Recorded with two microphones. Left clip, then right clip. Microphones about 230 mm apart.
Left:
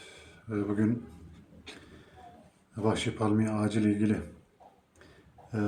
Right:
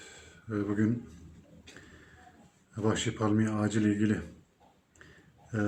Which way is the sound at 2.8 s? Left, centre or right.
Centre.